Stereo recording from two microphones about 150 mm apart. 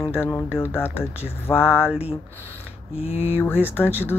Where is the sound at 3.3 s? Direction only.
15° left (ahead or behind).